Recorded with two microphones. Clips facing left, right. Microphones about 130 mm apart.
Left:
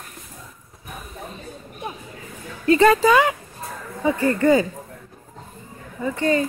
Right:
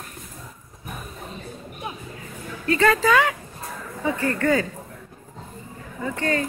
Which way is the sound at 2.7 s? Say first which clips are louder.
Left 4 dB; 20° left (ahead or behind).